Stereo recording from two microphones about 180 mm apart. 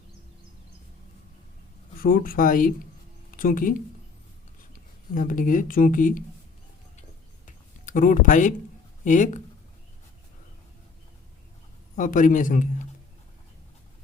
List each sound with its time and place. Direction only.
2.0 s speech: 50° left (ahead or behind)
5.1 s speech: 45° left (ahead or behind)
7.4 s a sound: 45° left (ahead or behind)
9.0 s speech: 45° left (ahead or behind)
11.9 s speech: 45° left (ahead or behind)